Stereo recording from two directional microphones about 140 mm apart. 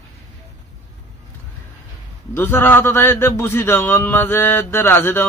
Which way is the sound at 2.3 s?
15° left (ahead or behind).